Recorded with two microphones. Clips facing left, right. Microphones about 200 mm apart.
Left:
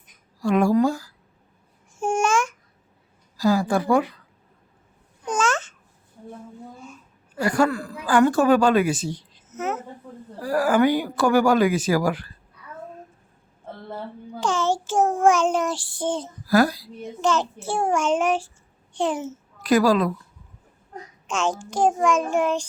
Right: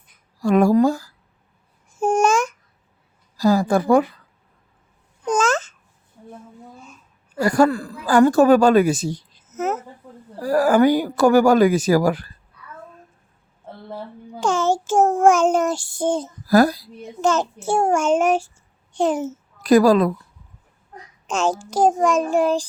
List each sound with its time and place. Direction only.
0.4 s speech: 40° right (ahead or behind)
2.0 s babbling: 40° right (ahead or behind)
3.3 s speech: 40° right (ahead or behind)
5.2 s babbling: 40° right (ahead or behind)
7.3 s speech: 40° right (ahead or behind)
14.4 s child singing: 45° right (ahead or behind)
18.9 s a child's voice: 40° right (ahead or behind)
21.2 s a child's voice: 40° right (ahead or behind)